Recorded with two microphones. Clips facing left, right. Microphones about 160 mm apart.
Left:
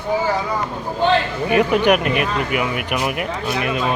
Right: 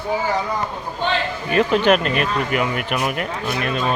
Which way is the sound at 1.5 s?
15° left (ahead or behind).